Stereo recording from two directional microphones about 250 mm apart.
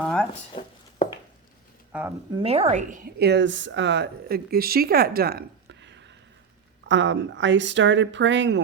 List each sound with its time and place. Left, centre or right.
0.0 s a sound: centre
0.5 s speech: centre
1.9 s speech: centre
2.3 s speech: right